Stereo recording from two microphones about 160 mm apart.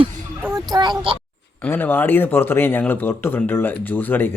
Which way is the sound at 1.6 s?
10° left (ahead or behind).